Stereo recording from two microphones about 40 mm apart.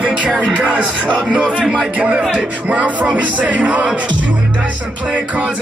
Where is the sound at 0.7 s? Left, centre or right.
Right.